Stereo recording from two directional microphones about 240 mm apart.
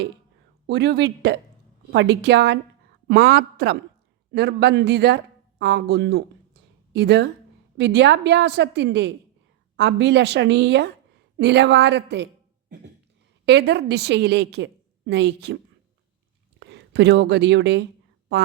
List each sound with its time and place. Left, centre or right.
0.7 s a woman's voice: right
16.6 s speech: right